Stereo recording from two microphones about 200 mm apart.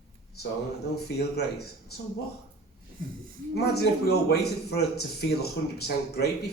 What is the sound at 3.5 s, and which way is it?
A man's voice, 55° left (ahead or behind).